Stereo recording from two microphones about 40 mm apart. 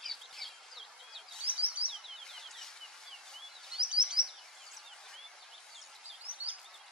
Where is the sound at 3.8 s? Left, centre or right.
Right.